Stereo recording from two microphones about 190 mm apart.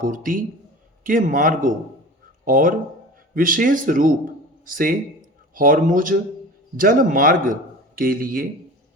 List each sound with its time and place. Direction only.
0.0 s speech: 45° right (ahead or behind)